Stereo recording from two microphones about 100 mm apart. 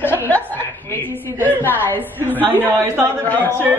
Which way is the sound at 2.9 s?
20° right (ahead or behind).